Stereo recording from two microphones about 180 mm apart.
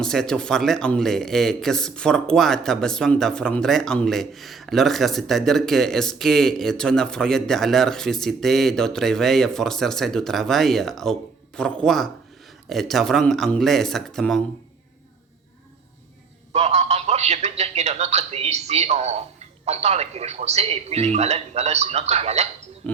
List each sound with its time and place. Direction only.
0.0 s a man's voice: 5° left (ahead or behind)
16.5 s a man's voice: 35° right (ahead or behind)